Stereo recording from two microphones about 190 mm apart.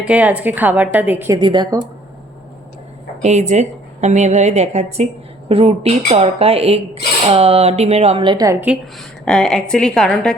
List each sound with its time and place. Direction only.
0.0 s a woman's voice: 5° right (ahead or behind)
1.4 s a woman's voice: 25° right (ahead or behind)
3.2 s a woman's voice: 35° right (ahead or behind)
8.6 s a woman's voice: centre (ahead or behind)